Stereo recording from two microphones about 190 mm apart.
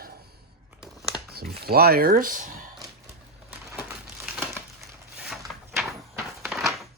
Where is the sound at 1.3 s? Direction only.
55° right (ahead or behind).